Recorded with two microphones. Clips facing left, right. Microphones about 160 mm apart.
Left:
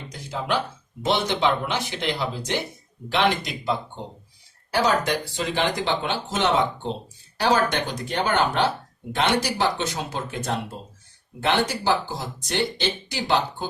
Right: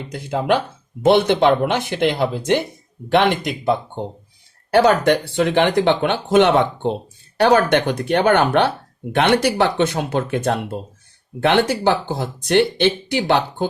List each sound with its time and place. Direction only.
0.1 s speech: 60° right (ahead or behind)